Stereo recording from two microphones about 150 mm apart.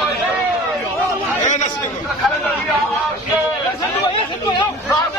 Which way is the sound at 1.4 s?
55° left (ahead or behind).